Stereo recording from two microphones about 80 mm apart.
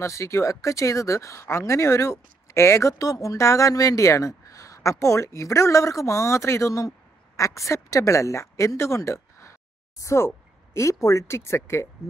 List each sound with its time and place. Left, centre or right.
0.0 s speech: left